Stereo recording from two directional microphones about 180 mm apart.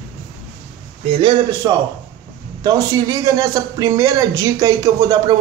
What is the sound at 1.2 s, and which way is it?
Speech, 25° right (ahead or behind).